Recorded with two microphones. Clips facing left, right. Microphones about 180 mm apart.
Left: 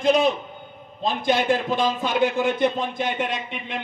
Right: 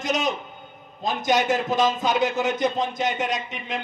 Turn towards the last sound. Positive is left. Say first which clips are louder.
# right 1 dB
turn(degrees=-40)  # may be behind; listen again after turning